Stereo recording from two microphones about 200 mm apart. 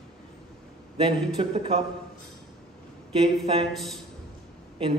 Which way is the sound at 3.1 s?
30° right (ahead or behind).